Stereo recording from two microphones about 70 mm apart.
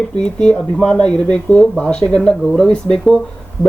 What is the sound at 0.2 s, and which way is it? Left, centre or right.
Speech, centre.